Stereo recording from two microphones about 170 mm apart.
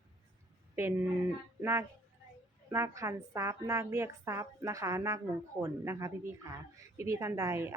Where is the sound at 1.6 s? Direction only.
15° right (ahead or behind).